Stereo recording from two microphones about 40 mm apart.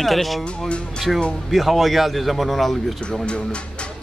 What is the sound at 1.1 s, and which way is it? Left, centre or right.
Speech, centre.